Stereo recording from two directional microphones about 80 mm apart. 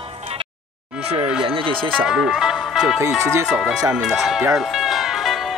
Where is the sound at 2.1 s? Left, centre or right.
Centre.